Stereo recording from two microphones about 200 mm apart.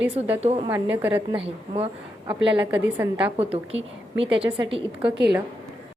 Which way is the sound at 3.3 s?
30° right (ahead or behind).